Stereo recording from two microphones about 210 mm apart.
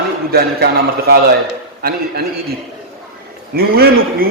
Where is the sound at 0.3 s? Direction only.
50° right (ahead or behind).